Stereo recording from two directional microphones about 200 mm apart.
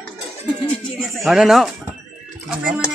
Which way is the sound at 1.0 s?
Centre (ahead or behind).